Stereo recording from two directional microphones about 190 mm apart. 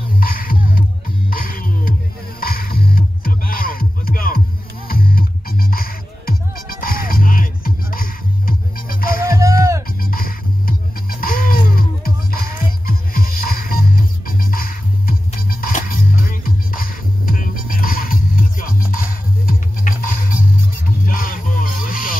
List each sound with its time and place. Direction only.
0.2 s music: 50° left (ahead or behind)
9.4 s music: 15° right (ahead or behind)
10.1 s music: 50° left (ahead or behind)